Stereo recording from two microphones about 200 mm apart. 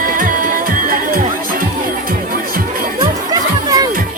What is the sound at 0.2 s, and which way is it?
Music, 45° right (ahead or behind).